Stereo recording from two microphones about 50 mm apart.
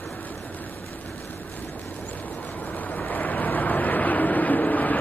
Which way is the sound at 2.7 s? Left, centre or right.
Left.